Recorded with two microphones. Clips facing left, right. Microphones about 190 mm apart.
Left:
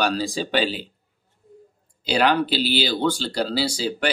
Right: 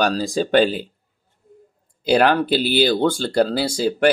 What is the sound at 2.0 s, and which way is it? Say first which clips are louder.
Speech: right 4 dB; 55° right (ahead or behind).